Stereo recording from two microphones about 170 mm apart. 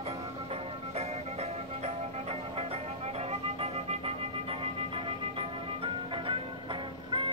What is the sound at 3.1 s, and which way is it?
Music, 35° right (ahead or behind).